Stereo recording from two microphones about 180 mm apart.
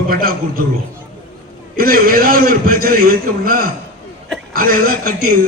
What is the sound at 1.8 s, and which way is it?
A man's voice, 55° right (ahead or behind).